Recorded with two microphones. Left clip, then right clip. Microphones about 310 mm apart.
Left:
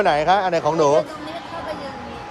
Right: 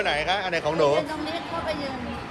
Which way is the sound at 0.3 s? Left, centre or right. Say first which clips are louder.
Left 6 dB; centre.